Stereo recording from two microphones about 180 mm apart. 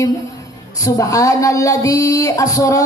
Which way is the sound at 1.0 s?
20° left (ahead or behind).